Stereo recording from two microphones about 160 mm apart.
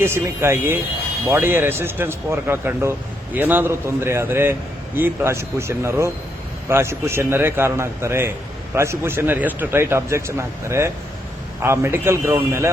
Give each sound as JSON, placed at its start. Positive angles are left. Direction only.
{"t": 0.0, "sound": "speech", "side_deg": -15}